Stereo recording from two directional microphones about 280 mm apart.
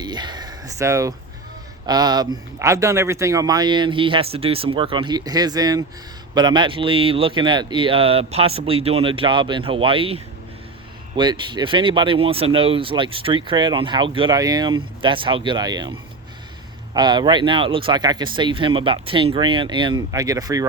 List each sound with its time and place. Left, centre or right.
0.0 s a sound: centre
1.9 s speech: centre
11.2 s speech: centre
16.9 s speech: centre